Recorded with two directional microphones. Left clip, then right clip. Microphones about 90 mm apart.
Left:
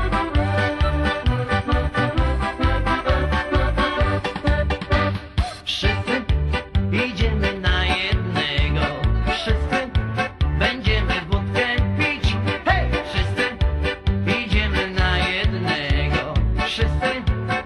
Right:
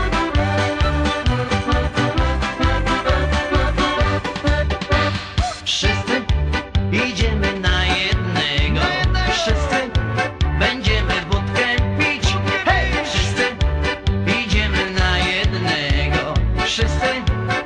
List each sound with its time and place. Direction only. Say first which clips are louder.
0.1 s music: right 1 dB; 30° left (ahead or behind)